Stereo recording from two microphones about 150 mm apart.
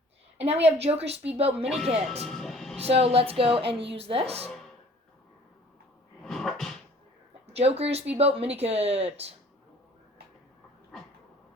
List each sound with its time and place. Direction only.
0.3 s speech: 45° right (ahead or behind)
1.6 s speech: centre (ahead or behind)
2.2 s music: centre (ahead or behind)
2.7 s speech: 45° right (ahead or behind)
6.2 s a sound: centre (ahead or behind)
7.5 s speech: 45° right (ahead or behind)